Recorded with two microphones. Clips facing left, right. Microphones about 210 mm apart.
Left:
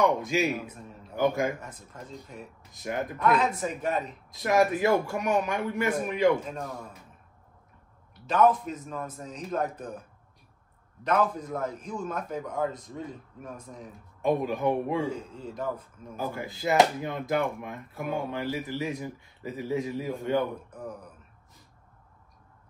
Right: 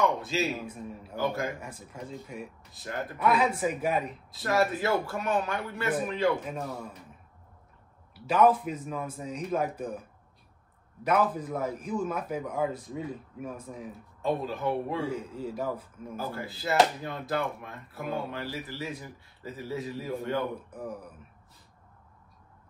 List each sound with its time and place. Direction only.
0.0 s speech: 15° left (ahead or behind)
0.5 s a man's voice: 5° right (ahead or behind)
1.1 s a man's voice: 15° left (ahead or behind)
1.6 s a man's voice: 10° right (ahead or behind)
2.7 s speech: 15° left (ahead or behind)
3.2 s a man's voice: 10° right (ahead or behind)
4.3 s speech: 15° left (ahead or behind)
8.1 s a man's voice: 5° right (ahead or behind)
11.1 s a man's voice: 5° right (ahead or behind)
14.2 s speech: 15° left (ahead or behind)
15.0 s a man's voice: 5° right (ahead or behind)
16.2 s speech: 15° left (ahead or behind)
20.7 s a man's voice: 10° right (ahead or behind)